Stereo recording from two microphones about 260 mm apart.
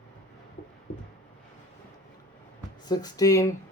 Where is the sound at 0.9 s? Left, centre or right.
Left.